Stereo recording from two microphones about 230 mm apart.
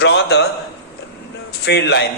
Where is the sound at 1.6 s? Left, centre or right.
Left.